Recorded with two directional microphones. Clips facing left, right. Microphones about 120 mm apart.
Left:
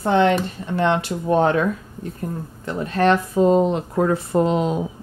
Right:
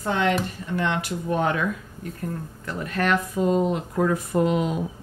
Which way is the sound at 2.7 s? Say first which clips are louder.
Left 6 dB; 25° left (ahead or behind).